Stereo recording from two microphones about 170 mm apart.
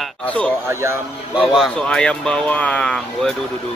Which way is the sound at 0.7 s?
15° right (ahead or behind).